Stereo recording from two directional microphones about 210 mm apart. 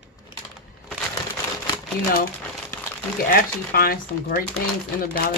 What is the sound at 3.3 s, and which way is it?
A woman's voice, 45° left (ahead or behind).